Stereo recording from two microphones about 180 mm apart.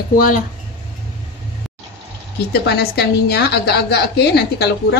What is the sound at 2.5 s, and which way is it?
A woman's voice, 65° left (ahead or behind).